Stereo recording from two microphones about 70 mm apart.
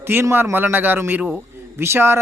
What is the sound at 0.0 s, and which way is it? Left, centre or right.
Speech, right.